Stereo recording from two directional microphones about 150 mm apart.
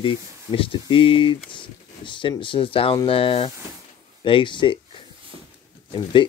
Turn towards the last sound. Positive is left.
turn(degrees=30)  # may be behind; listen again after turning